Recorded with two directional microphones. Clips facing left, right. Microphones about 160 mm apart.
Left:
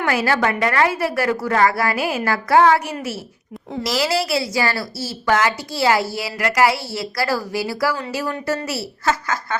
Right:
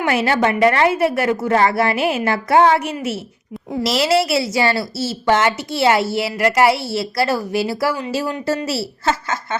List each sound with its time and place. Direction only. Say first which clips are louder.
0.0 s a woman's voice: right 2 dB; 25° right (ahead or behind)